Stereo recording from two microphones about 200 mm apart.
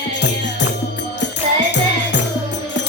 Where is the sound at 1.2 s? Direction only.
60° left (ahead or behind).